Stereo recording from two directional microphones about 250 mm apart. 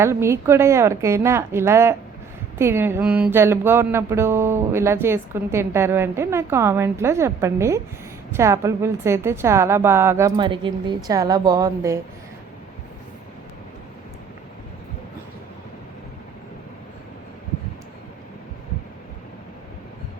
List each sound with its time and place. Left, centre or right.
0.0 s music: centre